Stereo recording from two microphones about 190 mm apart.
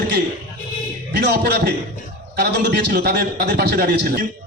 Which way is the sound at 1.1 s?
55° right (ahead or behind).